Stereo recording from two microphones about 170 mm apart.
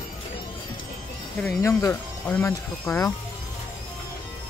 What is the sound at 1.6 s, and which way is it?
Speech, 15° left (ahead or behind).